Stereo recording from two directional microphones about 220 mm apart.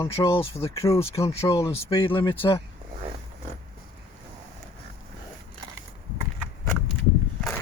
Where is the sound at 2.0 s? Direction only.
25° left (ahead or behind).